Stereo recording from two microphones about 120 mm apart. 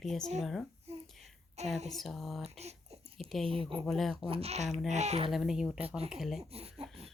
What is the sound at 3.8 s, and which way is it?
Speech, 5° left (ahead or behind).